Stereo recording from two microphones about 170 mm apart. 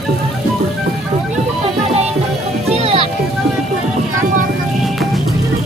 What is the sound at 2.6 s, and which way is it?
Music, 35° right (ahead or behind).